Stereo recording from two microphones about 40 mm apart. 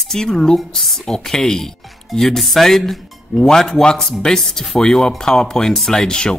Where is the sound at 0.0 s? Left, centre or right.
Centre.